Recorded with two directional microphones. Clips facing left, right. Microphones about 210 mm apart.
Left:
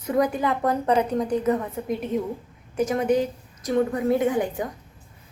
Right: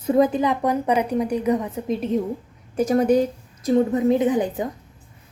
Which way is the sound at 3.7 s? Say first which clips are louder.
Right 4 dB; 25° right (ahead or behind).